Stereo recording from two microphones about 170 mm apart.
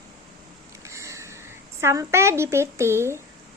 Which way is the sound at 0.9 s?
15° right (ahead or behind).